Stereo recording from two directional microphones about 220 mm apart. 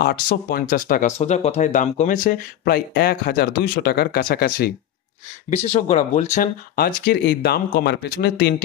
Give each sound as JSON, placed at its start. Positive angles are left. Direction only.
{"t": 0.0, "sound": "speech", "side_deg": 45}
{"t": 5.5, "sound": "speech", "side_deg": 30}